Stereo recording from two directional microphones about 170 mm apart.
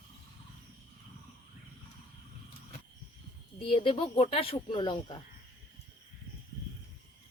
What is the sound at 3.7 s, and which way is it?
A woman's voice, 30° left (ahead or behind).